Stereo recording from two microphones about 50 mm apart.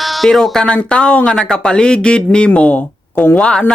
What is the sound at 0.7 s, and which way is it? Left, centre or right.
Speech, centre.